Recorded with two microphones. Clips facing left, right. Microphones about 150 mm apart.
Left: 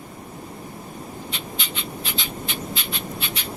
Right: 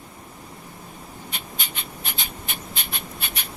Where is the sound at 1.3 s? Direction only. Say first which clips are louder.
Left 4 dB; 50° right (ahead or behind).